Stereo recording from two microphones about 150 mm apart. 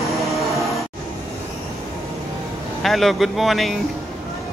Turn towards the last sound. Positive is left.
turn(degrees=0)  # may be behind; listen again after turning